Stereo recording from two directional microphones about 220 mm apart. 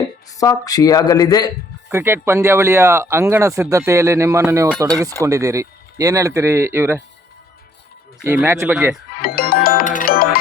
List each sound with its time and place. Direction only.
0.3 s speech: 15° left (ahead or behind)
1.9 s speech: 10° right (ahead or behind)
8.2 s speech: 10° right (ahead or behind)
9.2 s music: 40° left (ahead or behind)